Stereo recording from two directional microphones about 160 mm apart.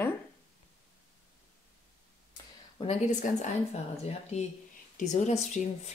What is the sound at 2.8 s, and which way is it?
Speech, 45° left (ahead or behind).